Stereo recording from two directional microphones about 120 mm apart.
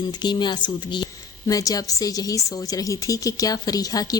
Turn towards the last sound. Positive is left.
turn(degrees=30)  # may be behind; listen again after turning